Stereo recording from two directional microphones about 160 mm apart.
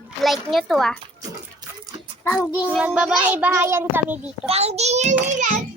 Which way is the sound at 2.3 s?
10° left (ahead or behind).